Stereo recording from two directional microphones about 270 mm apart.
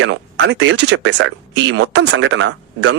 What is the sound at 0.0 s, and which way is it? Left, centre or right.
Speech, right.